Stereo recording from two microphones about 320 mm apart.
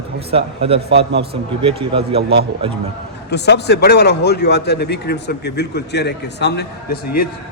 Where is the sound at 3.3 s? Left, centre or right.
Left.